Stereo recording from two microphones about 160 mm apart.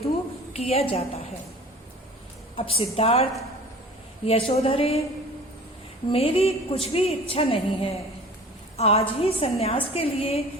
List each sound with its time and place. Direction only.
0.5 s a woman's voice: 40° left (ahead or behind)
2.6 s a woman's voice: 35° left (ahead or behind)
4.3 s a woman's voice: 40° left (ahead or behind)
6.1 s a woman's voice: 35° left (ahead or behind)